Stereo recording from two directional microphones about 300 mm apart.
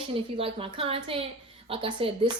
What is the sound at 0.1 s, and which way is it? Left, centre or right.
A woman's voice, centre.